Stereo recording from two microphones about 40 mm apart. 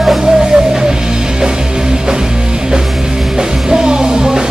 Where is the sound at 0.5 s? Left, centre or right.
Centre.